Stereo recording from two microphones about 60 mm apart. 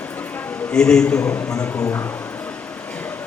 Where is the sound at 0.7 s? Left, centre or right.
Centre.